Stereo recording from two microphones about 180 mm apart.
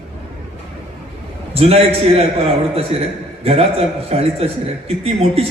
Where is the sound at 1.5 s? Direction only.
35° right (ahead or behind).